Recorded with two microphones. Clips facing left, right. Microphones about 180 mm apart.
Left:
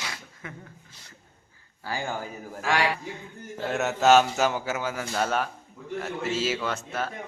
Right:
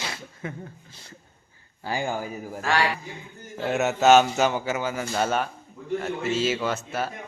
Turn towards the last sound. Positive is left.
turn(degrees=-5)  # may be behind; listen again after turning